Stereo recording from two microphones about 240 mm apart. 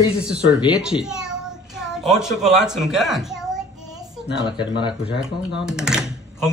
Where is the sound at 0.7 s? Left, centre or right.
Centre.